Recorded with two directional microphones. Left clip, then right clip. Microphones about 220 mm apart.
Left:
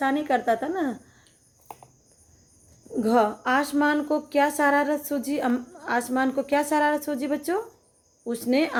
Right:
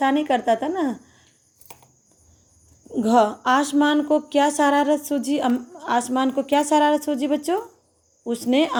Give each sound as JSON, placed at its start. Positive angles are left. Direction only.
{"t": 0.0, "sound": "a woman's voice", "side_deg": -25}
{"t": 2.9, "sound": "a woman's voice", "side_deg": -25}